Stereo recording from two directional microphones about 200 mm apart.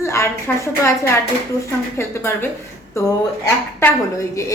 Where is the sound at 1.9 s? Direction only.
10° left (ahead or behind).